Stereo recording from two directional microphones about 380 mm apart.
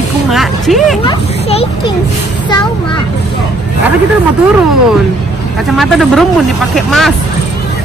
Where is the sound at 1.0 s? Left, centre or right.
Centre.